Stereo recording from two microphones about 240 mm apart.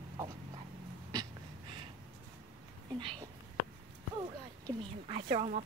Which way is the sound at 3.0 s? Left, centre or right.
Right.